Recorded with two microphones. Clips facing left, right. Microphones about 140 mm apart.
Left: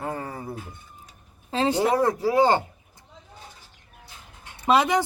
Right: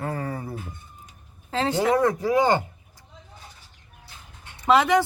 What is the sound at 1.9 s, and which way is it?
Speech, 30° left (ahead or behind).